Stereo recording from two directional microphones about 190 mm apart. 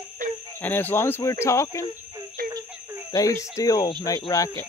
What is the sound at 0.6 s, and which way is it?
Speech, 10° left (ahead or behind).